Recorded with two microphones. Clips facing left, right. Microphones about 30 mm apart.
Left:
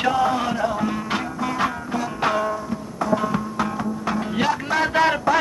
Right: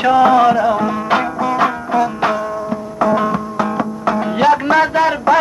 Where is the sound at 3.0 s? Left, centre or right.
Right.